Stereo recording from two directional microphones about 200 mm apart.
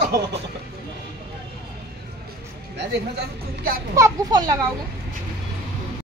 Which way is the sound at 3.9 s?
15° right (ahead or behind).